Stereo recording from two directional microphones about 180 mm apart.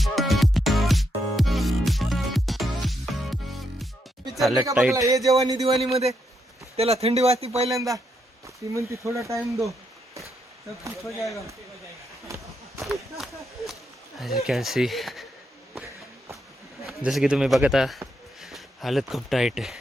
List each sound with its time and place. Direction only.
0.0 s music: centre (ahead or behind)
4.3 s a sound: centre (ahead or behind)
4.7 s speech: 5° right (ahead or behind)
4.9 s speech: 20° right (ahead or behind)
5.9 s speech: 35° right (ahead or behind)
7.8 s speech: 20° right (ahead or behind)
12.8 s a sound: centre (ahead or behind)
14.2 s speech: centre (ahead or behind)
16.8 s speech: centre (ahead or behind)